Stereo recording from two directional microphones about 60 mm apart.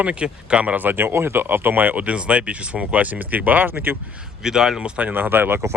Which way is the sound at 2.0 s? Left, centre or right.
Right.